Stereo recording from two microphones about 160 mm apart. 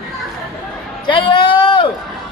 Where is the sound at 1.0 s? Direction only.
30° left (ahead or behind).